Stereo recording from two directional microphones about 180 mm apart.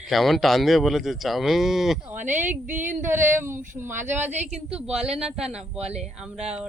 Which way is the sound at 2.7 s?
45° right (ahead or behind).